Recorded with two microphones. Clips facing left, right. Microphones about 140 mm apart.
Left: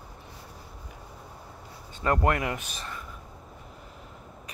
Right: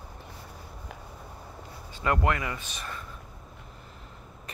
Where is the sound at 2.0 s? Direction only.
40° left (ahead or behind).